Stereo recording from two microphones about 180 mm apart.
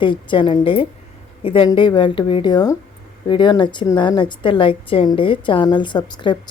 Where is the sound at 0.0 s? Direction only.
25° left (ahead or behind).